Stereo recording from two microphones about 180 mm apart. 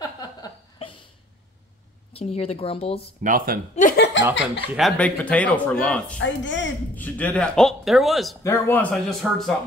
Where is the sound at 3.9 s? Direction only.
70° left (ahead or behind).